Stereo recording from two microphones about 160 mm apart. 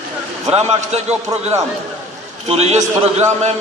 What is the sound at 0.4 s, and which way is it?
Speech, 40° right (ahead or behind).